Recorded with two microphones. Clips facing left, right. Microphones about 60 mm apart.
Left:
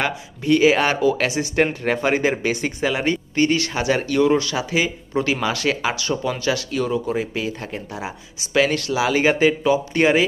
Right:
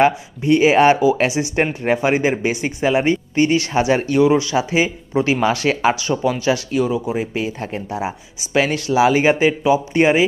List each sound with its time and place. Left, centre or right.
0.0 s speech: right
1.4 s a man's voice: centre; by 6.8 s right
6.8 s a man's voice: centre
7.2 s speech: right